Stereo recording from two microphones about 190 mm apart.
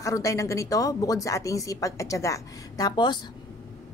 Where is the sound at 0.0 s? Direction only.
15° left (ahead or behind).